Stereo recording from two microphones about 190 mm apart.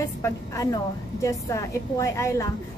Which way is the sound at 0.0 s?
15° left (ahead or behind).